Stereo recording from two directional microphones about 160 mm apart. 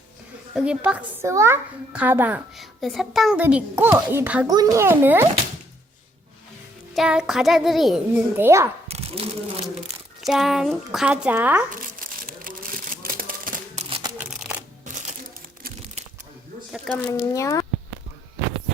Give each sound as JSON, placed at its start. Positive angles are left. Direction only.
{"t": 0.5, "sound": "a child's voice", "side_deg": -5}
{"t": 2.6, "sound": "a child's voice", "side_deg": 0}
{"t": 4.4, "sound": "a child's voice", "side_deg": -25}
{"t": 6.9, "sound": "a child's voice", "side_deg": -5}
{"t": 8.4, "sound": "a child's voice", "side_deg": -15}
{"t": 8.9, "sound": "speech", "side_deg": -40}
{"t": 10.2, "sound": "a child's voice", "side_deg": 0}
{"t": 11.9, "sound": "a sound", "side_deg": -60}
{"t": 13.8, "sound": "a sound", "side_deg": -45}
{"t": 14.2, "sound": "shuffling cards", "side_deg": -10}
{"t": 17.0, "sound": "speech", "side_deg": 20}